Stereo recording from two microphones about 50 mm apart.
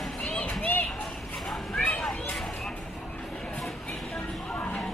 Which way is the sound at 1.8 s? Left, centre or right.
Left.